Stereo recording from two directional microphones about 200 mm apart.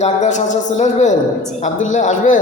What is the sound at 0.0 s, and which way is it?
A man's voice, 35° left (ahead or behind).